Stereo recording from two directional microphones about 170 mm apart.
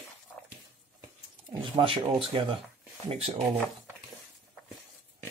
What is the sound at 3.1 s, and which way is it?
Speech, 35° right (ahead or behind).